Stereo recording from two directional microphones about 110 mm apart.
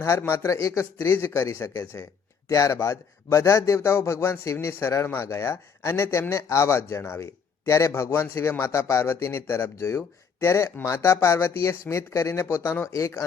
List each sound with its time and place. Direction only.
0.0 s a man's voice: 25° left (ahead or behind)